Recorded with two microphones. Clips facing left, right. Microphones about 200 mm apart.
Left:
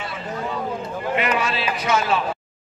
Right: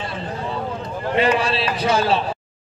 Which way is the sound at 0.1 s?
30° right (ahead or behind).